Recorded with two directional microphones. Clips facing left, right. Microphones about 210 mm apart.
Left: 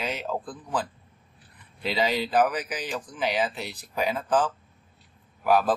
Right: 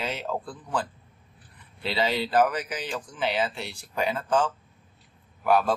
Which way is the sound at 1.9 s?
5° left (ahead or behind).